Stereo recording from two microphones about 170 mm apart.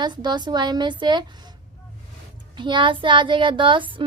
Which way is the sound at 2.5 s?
30° right (ahead or behind).